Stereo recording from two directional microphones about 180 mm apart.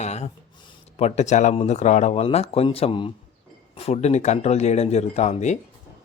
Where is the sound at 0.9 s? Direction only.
40° left (ahead or behind).